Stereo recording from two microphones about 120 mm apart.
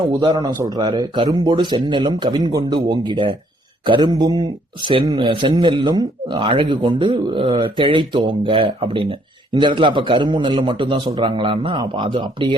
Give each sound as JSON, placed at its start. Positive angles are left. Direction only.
{"t": 0.4, "sound": "a man's voice", "side_deg": -30}